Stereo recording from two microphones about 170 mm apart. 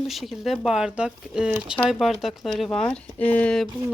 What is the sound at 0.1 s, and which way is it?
Speech, centre (ahead or behind).